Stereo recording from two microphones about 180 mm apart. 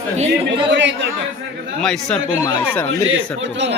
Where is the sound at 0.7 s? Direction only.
80° right.